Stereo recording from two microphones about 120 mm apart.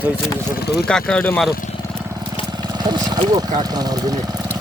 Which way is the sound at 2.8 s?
35° right (ahead or behind).